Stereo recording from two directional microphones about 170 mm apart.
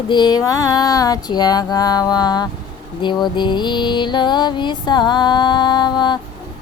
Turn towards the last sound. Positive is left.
turn(degrees=25)  # may be behind; listen again after turning